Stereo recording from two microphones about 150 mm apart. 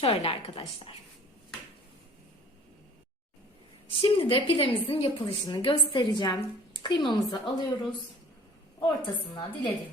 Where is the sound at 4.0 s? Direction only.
35° left (ahead or behind).